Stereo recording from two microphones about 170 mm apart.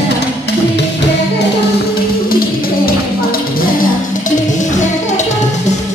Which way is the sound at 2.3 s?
60° left (ahead or behind).